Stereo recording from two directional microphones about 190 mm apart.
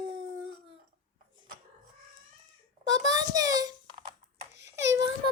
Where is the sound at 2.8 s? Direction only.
20° right (ahead or behind).